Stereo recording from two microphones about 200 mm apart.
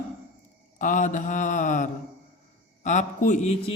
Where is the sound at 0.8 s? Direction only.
40° left (ahead or behind).